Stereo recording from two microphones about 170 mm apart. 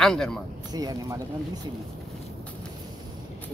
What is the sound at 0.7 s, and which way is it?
Speech, 20° right (ahead or behind).